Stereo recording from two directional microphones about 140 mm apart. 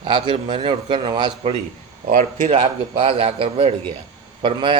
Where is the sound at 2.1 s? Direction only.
75° right (ahead or behind).